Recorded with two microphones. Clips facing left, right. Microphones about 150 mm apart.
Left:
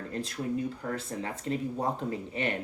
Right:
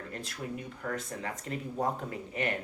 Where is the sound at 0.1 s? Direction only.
30° left (ahead or behind).